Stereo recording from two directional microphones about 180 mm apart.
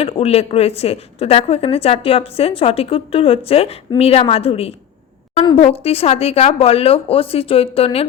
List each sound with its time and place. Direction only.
0.0 s a woman's voice: 35° left (ahead or behind)